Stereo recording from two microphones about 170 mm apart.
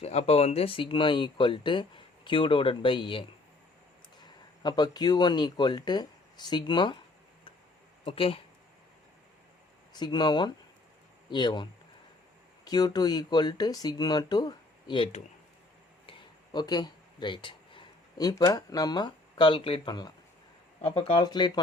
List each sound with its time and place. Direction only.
0.0 s speech: 40° left (ahead or behind)
8.0 s speech: 30° left (ahead or behind)
9.9 s speech: 25° left (ahead or behind)